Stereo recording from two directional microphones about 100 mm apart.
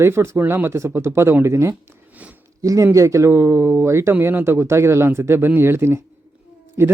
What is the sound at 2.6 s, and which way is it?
Speech, 35° right (ahead or behind).